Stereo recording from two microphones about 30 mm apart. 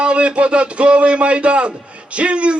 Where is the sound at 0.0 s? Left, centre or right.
Right.